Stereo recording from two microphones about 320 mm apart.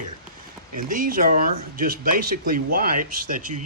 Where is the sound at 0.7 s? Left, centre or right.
Right.